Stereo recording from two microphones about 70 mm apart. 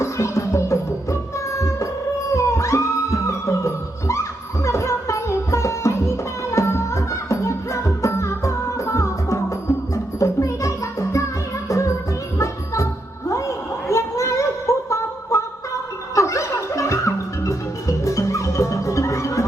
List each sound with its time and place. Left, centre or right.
0.0 s music: left
13.8 s a sound: left
16.1 s music: left